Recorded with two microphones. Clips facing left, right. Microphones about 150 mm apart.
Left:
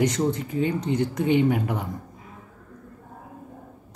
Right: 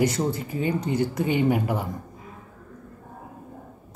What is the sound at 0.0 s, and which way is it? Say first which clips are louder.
Speech: left 1 dB; 5° right (ahead or behind).